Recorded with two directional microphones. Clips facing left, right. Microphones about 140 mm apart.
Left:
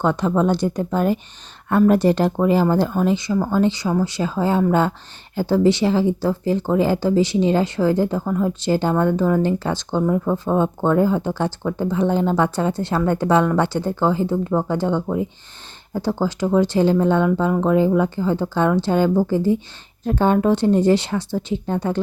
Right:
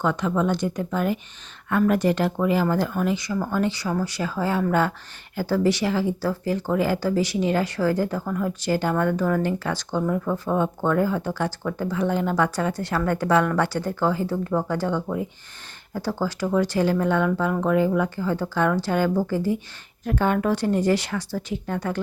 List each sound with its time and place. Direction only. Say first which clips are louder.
0.0 s a woman's voice: left 4 dB; 30° left (ahead or behind)